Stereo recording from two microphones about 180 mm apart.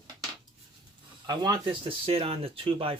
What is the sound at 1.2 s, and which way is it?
Speech, 25° right (ahead or behind).